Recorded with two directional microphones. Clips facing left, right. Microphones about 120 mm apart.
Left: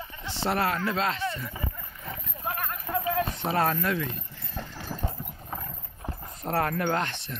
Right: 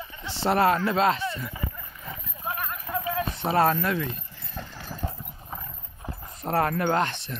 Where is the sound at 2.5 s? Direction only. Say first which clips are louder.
Even; 55° left (ahead or behind).